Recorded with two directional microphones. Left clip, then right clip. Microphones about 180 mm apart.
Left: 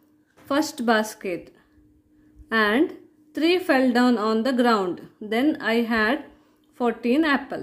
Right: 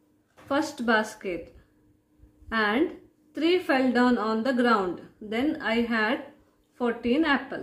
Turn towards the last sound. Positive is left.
turn(degrees=50)  # may be behind; listen again after turning